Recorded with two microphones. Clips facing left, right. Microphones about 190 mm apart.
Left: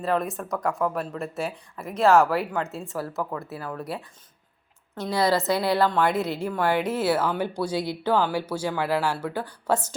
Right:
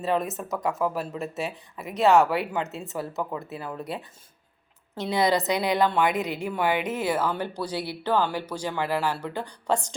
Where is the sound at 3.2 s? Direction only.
20° right (ahead or behind).